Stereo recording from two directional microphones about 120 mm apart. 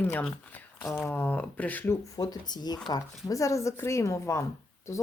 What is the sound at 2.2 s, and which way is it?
Speech, 35° left (ahead or behind).